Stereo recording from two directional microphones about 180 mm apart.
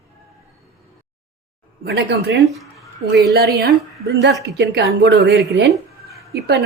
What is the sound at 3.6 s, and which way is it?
Speech, 65° right (ahead or behind).